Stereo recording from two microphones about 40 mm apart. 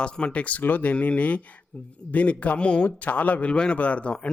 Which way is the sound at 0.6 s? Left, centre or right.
Left.